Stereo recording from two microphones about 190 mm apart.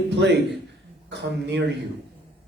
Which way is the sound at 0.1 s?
65° right (ahead or behind).